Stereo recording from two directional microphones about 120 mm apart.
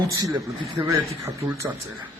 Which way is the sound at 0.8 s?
20° right (ahead or behind).